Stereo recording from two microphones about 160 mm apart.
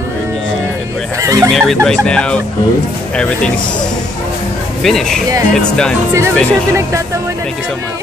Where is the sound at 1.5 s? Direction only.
Centre (ahead or behind).